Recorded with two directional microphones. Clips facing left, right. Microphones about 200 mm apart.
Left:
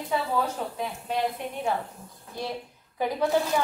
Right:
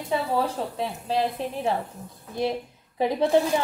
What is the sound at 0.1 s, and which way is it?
Coin, 30° right (ahead or behind).